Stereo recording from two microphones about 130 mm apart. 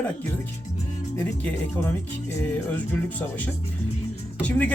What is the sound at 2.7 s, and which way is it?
Speech, 10° left (ahead or behind).